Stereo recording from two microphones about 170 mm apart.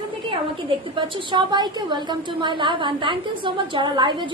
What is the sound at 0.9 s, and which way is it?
A woman's voice, 25° right (ahead or behind).